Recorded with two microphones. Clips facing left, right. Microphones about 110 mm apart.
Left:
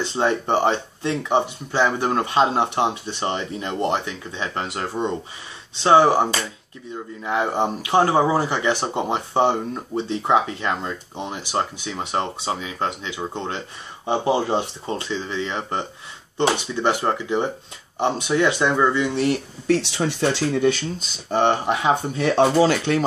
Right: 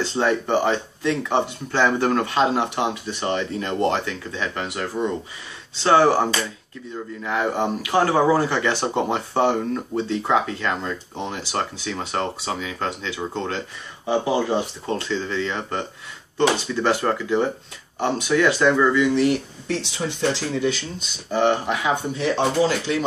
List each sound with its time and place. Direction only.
0.0 s speech: 20° left (ahead or behind)
7.2 s speech: 20° left (ahead or behind)
14.0 s speech: 30° left (ahead or behind)
14.9 s speech: 15° left (ahead or behind)
20.1 s speech: 60° left (ahead or behind)
21.3 s speech: 35° left (ahead or behind)
22.1 s speech: 60° left (ahead or behind)